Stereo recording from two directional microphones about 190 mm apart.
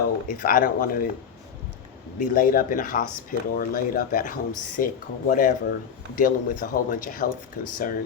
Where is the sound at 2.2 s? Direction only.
45° left (ahead or behind).